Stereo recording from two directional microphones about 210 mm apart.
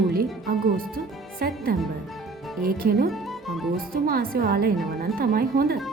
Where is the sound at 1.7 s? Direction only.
45° right (ahead or behind).